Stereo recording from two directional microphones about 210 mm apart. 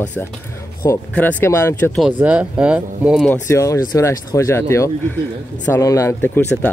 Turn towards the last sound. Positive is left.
turn(degrees=10)  # may be behind; listen again after turning